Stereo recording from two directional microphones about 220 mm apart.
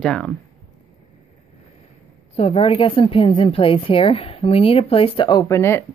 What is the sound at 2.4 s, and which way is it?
A woman's voice, 25° left (ahead or behind).